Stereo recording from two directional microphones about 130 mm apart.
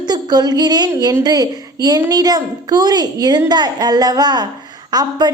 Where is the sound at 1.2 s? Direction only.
30° right (ahead or behind).